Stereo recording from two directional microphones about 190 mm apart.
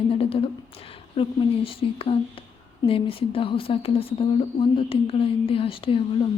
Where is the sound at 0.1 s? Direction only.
30° left (ahead or behind).